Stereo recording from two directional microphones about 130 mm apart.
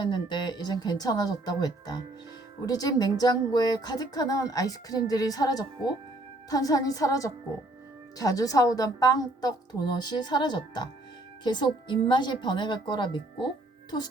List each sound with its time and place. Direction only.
0.0 s a woman's voice: 35° left (ahead or behind)